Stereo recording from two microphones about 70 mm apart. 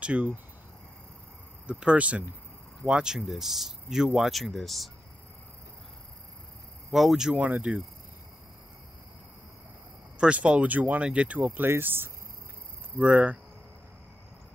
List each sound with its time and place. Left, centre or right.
0.0 s speech: centre
1.7 s speech: centre
6.9 s speech: centre
7.3 s speech: right
10.1 s speech: centre
12.9 s speech: centre